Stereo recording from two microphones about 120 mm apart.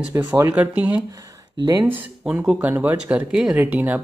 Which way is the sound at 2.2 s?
5° right (ahead or behind).